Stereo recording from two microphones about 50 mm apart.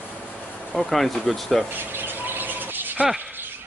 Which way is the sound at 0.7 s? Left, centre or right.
Centre.